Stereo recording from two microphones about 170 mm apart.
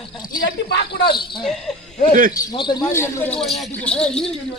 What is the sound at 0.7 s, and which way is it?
Speech, 75° left (ahead or behind).